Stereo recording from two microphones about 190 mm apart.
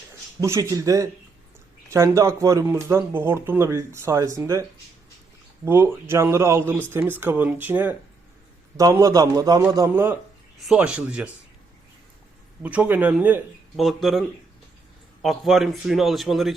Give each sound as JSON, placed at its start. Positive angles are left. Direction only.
{"t": 0.3, "sound": "speech", "side_deg": -15}
{"t": 5.6, "sound": "a man's voice", "side_deg": -10}
{"t": 12.6, "sound": "a man's voice", "side_deg": -5}